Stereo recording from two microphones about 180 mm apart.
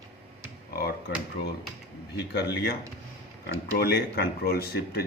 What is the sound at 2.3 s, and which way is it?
Speech, 65° left (ahead or behind).